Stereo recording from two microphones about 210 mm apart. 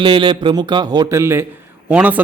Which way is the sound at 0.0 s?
25° right (ahead or behind).